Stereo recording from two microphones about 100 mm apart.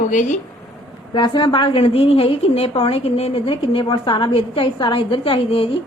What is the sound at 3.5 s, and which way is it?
A woman's voice, 55° left (ahead or behind).